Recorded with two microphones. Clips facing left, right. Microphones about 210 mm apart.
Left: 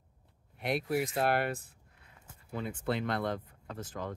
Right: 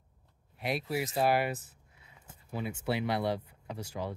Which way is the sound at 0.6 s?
Centre (ahead or behind).